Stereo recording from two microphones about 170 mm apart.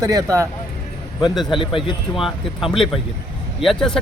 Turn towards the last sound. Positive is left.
turn(degrees=5)  # may be behind; listen again after turning